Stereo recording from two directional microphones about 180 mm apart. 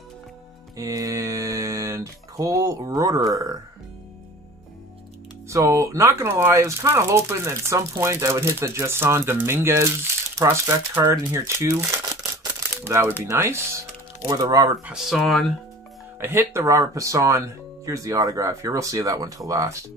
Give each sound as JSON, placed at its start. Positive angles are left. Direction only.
{"t": 0.7, "sound": "speech", "side_deg": -20}
{"t": 5.5, "sound": "speech", "side_deg": -15}
{"t": 12.2, "sound": "a sound", "side_deg": -10}
{"t": 14.2, "sound": "speech", "side_deg": -20}
{"t": 14.9, "sound": "speech", "side_deg": 0}
{"t": 16.2, "sound": "speech", "side_deg": -15}